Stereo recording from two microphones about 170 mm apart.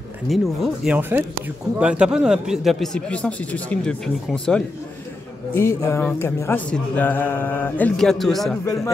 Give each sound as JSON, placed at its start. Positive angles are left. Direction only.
{"t": 0.3, "sound": "speech", "side_deg": 0}
{"t": 0.9, "sound": "speech", "side_deg": -10}
{"t": 5.5, "sound": "speech", "side_deg": 15}